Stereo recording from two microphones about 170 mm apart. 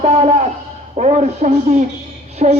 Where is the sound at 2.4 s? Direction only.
50° right (ahead or behind).